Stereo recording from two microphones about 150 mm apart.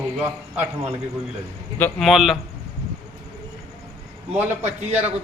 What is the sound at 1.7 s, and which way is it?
Speech, 5° left (ahead or behind).